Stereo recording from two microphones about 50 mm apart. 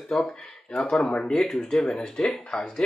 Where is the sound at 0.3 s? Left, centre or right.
Centre.